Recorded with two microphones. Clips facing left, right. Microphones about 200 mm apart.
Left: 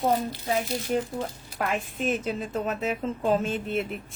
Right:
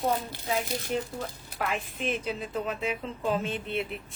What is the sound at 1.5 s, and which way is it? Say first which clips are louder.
A woman's voice: left 3 dB; 45° left (ahead or behind).